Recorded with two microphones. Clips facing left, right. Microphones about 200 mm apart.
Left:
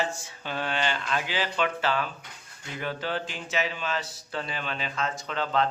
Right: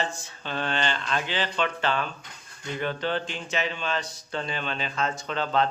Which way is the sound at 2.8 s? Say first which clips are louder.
Right 3 dB; 5° left (ahead or behind).